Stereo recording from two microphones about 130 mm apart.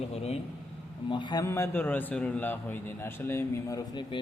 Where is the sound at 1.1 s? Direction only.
35° left (ahead or behind).